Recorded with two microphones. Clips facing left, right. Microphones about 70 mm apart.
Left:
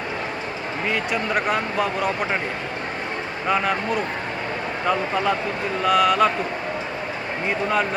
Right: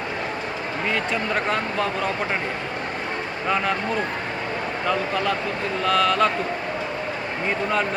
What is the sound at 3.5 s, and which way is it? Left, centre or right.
Speech, centre.